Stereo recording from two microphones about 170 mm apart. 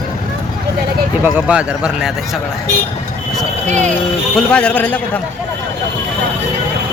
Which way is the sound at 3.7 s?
45° right (ahead or behind).